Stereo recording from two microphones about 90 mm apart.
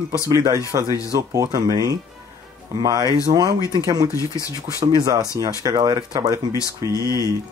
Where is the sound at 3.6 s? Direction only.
40° left (ahead or behind).